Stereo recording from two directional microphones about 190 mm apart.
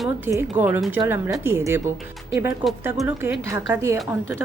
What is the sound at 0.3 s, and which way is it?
A woman's voice, 10° right (ahead or behind).